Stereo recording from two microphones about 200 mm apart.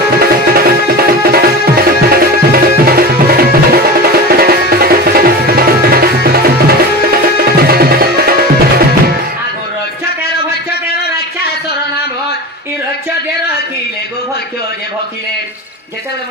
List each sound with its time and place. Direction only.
0.2 s music: 50° right (ahead or behind)